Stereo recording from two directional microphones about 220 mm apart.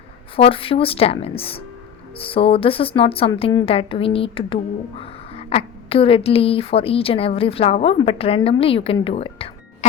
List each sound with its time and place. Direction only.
0.3 s speech: 25° left (ahead or behind)